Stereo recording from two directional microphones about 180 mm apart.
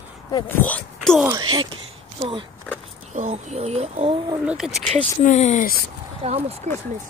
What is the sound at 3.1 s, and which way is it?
Speech, 40° right (ahead or behind).